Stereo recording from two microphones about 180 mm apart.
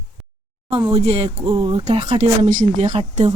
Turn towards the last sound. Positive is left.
turn(degrees=-35)  # may be behind; listen again after turning